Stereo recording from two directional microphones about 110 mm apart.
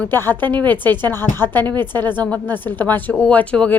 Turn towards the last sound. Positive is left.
turn(degrees=10)  # may be behind; listen again after turning